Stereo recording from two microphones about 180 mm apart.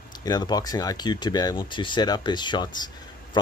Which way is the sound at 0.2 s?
20° left (ahead or behind).